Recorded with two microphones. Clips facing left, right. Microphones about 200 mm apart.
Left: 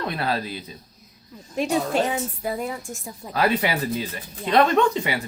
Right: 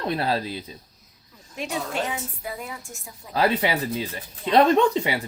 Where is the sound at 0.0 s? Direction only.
30° right (ahead or behind).